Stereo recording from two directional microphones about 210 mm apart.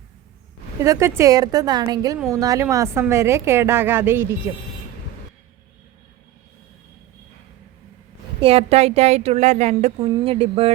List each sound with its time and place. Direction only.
0.8 s a woman's voice: 15° right (ahead or behind)
8.4 s a woman's voice: 25° right (ahead or behind)